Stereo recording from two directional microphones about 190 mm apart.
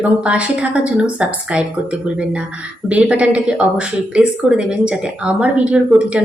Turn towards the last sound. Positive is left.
turn(degrees=-5)  # may be behind; listen again after turning